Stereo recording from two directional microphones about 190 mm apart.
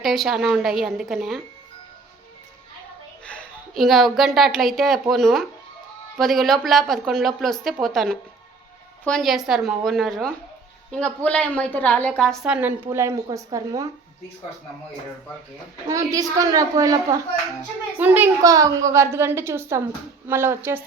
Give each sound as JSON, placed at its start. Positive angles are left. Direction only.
{"t": 0.0, "sound": "a woman's voice", "side_deg": 0}
{"t": 3.2, "sound": "a woman's voice", "side_deg": 5}
{"t": 16.1, "sound": "a woman's voice", "side_deg": -20}